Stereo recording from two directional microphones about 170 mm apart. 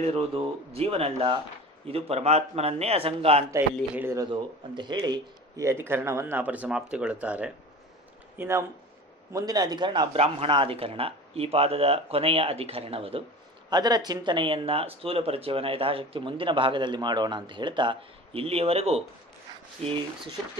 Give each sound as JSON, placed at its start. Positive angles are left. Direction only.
{"t": 0.0, "sound": "speech", "side_deg": -35}
{"t": 3.5, "sound": "speech", "side_deg": -15}
{"t": 4.3, "sound": "speech", "side_deg": -25}
{"t": 13.7, "sound": "speech", "side_deg": -25}